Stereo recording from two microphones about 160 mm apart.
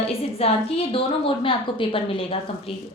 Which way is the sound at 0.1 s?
40° left (ahead or behind).